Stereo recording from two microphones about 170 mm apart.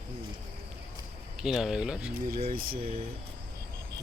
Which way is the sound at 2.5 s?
60° right (ahead or behind).